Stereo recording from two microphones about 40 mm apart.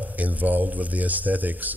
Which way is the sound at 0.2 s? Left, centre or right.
Right.